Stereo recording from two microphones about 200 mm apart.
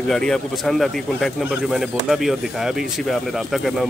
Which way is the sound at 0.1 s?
Centre (ahead or behind).